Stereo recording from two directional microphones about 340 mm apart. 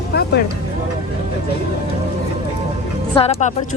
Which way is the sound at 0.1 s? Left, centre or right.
Left.